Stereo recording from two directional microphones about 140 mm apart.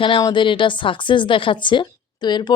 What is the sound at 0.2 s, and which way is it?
Speech, 30° left (ahead or behind).